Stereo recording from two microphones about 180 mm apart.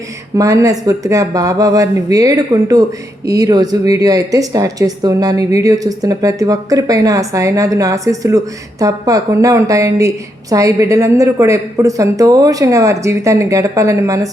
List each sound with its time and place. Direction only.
0.3 s a woman's voice: 20° right (ahead or behind)